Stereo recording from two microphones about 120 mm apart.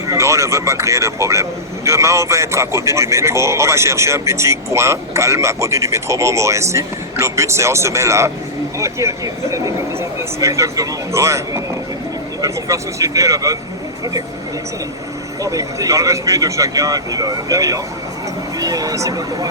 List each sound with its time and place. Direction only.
0.1 s a man's voice: 25° right (ahead or behind)
15.4 s a man's voice: 30° right (ahead or behind)